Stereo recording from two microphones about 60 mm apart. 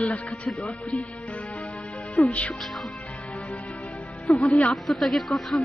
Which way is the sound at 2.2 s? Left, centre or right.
Left.